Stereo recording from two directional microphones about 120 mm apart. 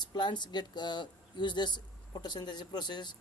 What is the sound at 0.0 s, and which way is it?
Speech, 35° left (ahead or behind).